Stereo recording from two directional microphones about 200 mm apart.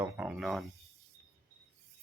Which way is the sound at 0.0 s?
5° right (ahead or behind).